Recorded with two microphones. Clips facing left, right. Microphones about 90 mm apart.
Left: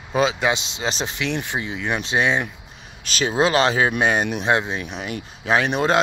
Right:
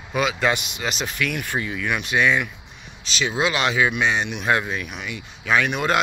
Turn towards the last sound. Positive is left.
turn(degrees=30)  # may be behind; listen again after turning